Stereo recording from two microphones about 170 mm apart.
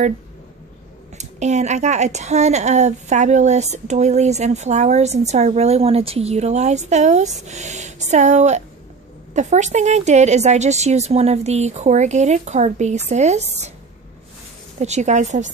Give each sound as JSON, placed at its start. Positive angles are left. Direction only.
{"t": 1.1, "sound": "speech", "side_deg": -45}
{"t": 14.8, "sound": "speech", "side_deg": -45}